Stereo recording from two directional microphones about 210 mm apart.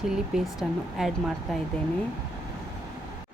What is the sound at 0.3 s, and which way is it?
A woman's voice, centre (ahead or behind).